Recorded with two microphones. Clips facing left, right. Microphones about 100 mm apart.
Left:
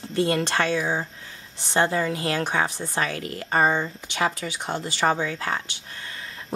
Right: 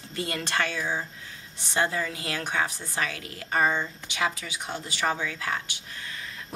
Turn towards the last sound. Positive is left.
turn(degrees=35)  # may be behind; listen again after turning